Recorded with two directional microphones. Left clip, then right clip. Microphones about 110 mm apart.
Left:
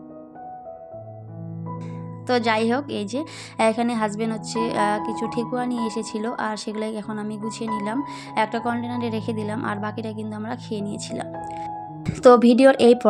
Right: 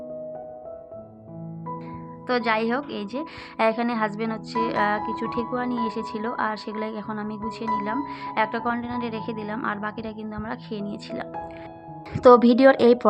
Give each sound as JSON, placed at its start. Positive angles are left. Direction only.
{"t": 2.2, "sound": "a woman's voice", "side_deg": 50}
{"t": 12.3, "sound": "speech", "side_deg": 15}